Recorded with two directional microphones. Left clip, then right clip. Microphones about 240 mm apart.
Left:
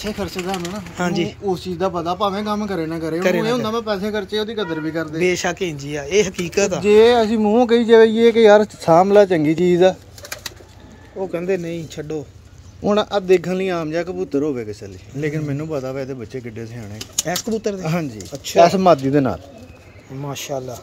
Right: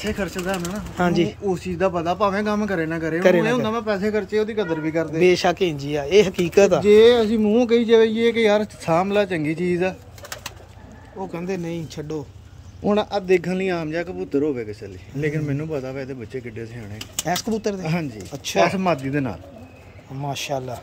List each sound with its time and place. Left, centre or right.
0.9 s speech: centre
5.2 s speech: centre
6.8 s a man's voice: centre
11.3 s speech: centre
12.8 s a man's voice: left
17.3 s speech: centre
18.7 s a man's voice: left
20.2 s speech: centre